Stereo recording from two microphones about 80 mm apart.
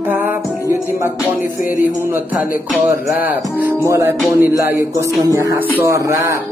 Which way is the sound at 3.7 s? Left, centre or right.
Right.